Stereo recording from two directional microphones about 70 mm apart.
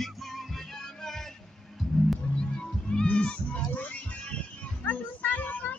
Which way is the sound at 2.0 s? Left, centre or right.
Centre.